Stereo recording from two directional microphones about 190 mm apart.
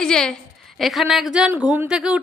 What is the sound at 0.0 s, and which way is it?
A woman's voice, 5° left (ahead or behind).